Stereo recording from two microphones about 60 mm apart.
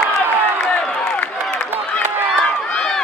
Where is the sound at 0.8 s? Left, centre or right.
Centre.